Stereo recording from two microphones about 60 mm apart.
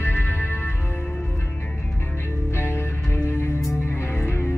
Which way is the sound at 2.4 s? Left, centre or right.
Left.